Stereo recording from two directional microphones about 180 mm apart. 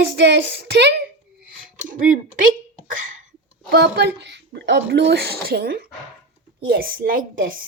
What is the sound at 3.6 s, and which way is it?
A woman's voice, 65° right (ahead or behind).